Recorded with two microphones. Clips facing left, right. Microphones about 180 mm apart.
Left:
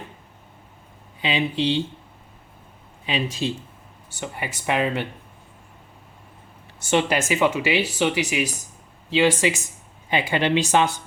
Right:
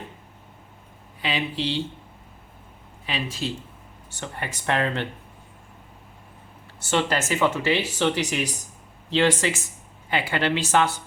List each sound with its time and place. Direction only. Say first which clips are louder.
1.2 s speech: left 4 dB; 20° left (ahead or behind)
3.1 s speech: left 4 dB; 20° left (ahead or behind)
6.8 s speech: left 3 dB; 15° left (ahead or behind)